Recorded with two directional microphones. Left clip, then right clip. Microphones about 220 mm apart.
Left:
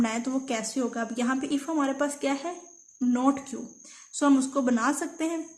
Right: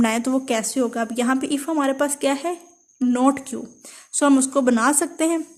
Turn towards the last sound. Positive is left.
turn(degrees=-50)  # may be behind; listen again after turning